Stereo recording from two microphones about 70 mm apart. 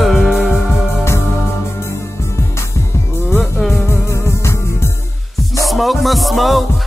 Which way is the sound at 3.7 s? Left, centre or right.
Left.